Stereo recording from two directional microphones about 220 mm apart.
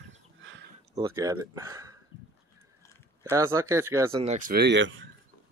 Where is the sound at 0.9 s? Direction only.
15° right (ahead or behind).